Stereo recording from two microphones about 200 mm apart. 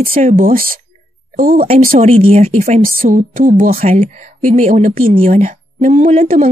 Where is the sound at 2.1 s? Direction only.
35° right (ahead or behind).